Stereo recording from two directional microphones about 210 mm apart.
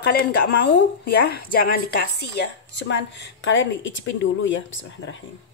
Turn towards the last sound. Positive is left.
turn(degrees=65)  # may be behind; listen again after turning